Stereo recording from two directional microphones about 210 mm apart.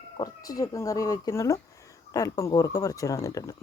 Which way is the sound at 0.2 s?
15° left (ahead or behind).